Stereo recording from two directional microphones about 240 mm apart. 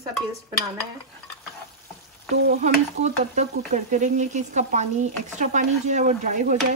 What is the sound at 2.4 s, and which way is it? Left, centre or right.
Stir, right.